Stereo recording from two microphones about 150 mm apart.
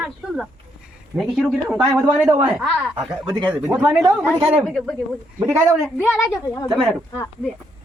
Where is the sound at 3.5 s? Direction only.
5° right (ahead or behind).